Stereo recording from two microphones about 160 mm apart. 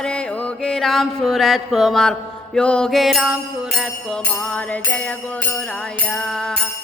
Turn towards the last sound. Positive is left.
turn(degrees=5)  # may be behind; listen again after turning